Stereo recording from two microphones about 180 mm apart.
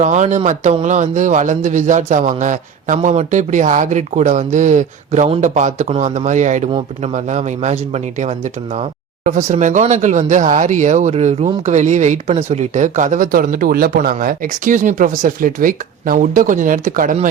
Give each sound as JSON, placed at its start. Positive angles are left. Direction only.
{"t": 0.0, "sound": "a man's voice", "side_deg": -40}